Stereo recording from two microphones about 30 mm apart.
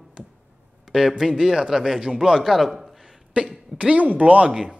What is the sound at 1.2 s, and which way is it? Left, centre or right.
A man's voice, centre.